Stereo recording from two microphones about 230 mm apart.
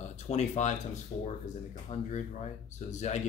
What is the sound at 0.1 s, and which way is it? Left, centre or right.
Speech, left.